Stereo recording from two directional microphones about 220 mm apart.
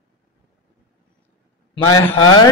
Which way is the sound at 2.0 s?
15° left (ahead or behind).